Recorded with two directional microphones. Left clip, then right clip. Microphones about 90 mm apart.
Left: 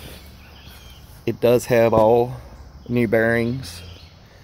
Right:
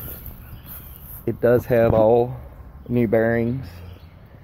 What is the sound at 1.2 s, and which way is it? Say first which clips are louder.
Speech: left 1 dB; 35° left (ahead or behind).